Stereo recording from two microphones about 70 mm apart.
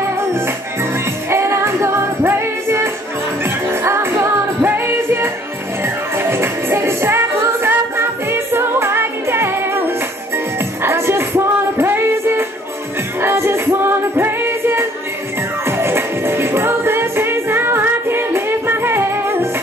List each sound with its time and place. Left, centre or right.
1.3 s music: right